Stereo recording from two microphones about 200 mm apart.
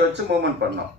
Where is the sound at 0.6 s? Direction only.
60° right (ahead or behind).